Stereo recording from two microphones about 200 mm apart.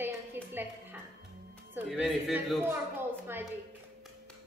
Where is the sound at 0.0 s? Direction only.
10° right (ahead or behind).